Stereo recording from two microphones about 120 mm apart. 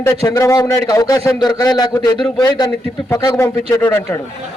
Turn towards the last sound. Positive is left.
turn(degrees=20)  # may be behind; listen again after turning